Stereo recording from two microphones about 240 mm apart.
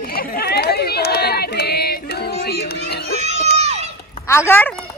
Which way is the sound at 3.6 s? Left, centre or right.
Right.